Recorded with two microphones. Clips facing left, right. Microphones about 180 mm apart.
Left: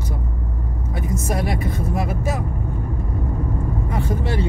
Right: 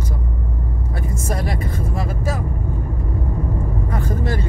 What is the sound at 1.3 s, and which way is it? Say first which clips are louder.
Speech: left 1 dB; 20° left (ahead or behind).